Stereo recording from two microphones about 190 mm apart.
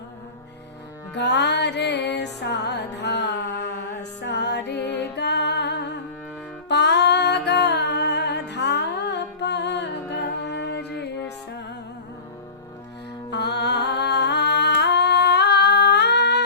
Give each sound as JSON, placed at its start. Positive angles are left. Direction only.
{"t": 1.1, "sound": "music", "side_deg": 65}
{"t": 13.3, "sound": "humming", "side_deg": 60}